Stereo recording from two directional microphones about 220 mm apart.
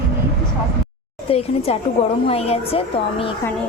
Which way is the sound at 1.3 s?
25° left (ahead or behind).